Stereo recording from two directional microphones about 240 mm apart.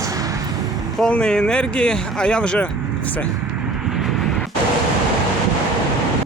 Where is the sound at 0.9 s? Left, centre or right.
Centre.